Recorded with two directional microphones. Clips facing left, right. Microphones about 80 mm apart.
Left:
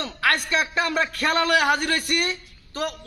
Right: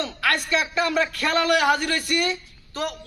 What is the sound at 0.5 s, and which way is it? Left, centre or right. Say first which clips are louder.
A man's voice: right 1 dB; left.